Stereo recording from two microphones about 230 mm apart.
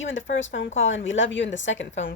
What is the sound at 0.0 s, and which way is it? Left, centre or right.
Speech, left.